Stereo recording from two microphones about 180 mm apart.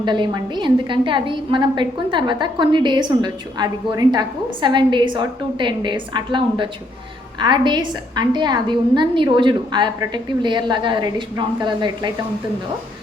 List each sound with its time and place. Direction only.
0.0 s a woman's voice: 25° right (ahead or behind)